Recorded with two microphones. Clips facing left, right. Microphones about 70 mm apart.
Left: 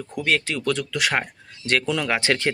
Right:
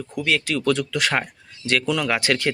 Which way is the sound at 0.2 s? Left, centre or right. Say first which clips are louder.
Even; left.